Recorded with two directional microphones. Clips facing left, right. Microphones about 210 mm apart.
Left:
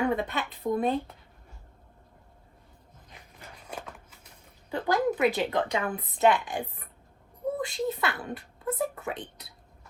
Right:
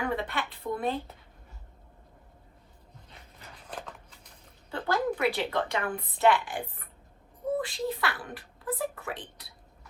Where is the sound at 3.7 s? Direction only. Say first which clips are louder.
Left 1 dB; 10° left (ahead or behind).